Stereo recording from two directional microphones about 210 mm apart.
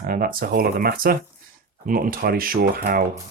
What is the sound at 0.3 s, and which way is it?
Speech, 45° right (ahead or behind).